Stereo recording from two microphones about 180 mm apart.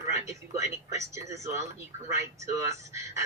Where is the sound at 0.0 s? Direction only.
15° right (ahead or behind).